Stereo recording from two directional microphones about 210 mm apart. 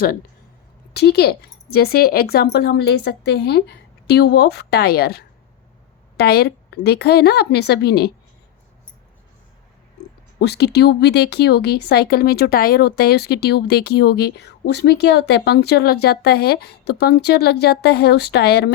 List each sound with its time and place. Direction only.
0.9 s speech: 50° left (ahead or behind)
10.4 s speech: 50° left (ahead or behind)